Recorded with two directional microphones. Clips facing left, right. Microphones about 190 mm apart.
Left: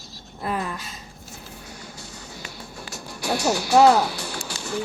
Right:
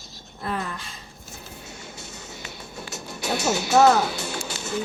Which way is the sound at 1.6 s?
25° right (ahead or behind).